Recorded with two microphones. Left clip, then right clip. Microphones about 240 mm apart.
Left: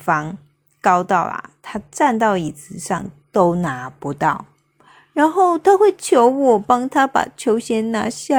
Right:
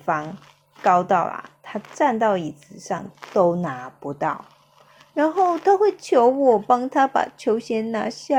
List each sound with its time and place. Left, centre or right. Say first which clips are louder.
0.0 s speech: left 5 dB; left